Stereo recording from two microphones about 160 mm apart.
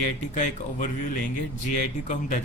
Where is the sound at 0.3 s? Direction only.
55° left (ahead or behind).